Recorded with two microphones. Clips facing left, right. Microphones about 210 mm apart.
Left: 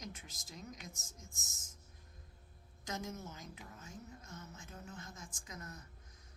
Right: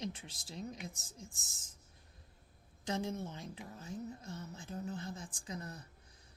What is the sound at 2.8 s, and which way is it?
A woman's voice, 30° right (ahead or behind).